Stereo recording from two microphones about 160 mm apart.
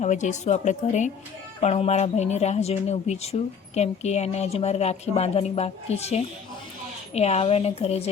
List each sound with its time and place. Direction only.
0.0 s a woman's voice: 45° left (ahead or behind)